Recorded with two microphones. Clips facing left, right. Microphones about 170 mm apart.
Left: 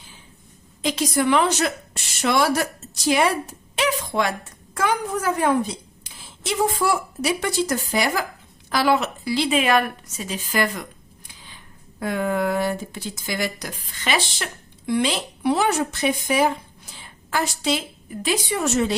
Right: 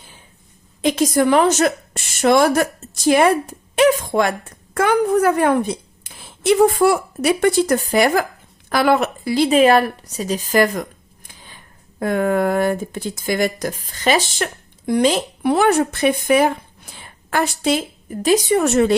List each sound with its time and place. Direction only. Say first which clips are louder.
0.8 s a woman's voice: right 6 dB; 55° right (ahead or behind)